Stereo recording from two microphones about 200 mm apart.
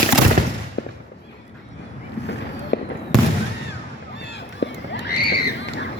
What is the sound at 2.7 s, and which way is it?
Fireworks, 55° left (ahead or behind).